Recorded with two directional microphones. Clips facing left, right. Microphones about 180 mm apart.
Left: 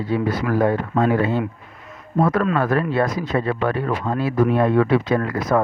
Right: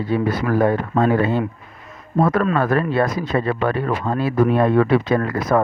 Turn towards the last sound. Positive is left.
turn(degrees=-55)  # may be behind; listen again after turning